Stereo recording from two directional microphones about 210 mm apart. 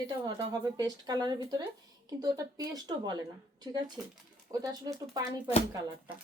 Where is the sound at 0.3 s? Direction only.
20° right (ahead or behind).